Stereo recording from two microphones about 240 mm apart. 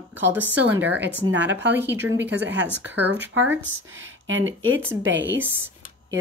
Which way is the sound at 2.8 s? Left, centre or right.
Right.